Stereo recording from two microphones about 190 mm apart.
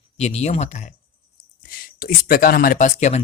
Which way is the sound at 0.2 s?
35° left (ahead or behind).